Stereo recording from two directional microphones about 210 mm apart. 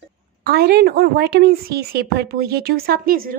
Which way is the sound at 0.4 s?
50° right (ahead or behind).